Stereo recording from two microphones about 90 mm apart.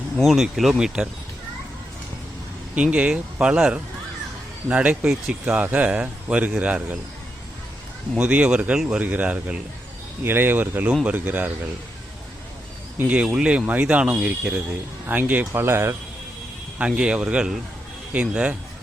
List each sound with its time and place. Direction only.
0.2 s speech: centre (ahead or behind)
2.7 s speech: 15° right (ahead or behind)
8.2 s speech: 15° right (ahead or behind)
13.0 s speech: 15° right (ahead or behind); by 16.0 s 30° right (ahead or behind)
16.7 s speech: 10° right (ahead or behind)